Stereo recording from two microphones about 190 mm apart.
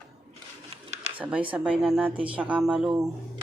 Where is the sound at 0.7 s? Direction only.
35° right (ahead or behind).